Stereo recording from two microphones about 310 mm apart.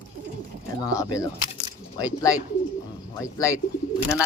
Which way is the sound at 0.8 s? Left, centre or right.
Centre.